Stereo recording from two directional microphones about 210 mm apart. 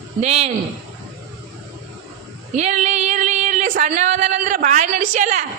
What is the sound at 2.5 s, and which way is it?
Speech, 35° right (ahead or behind).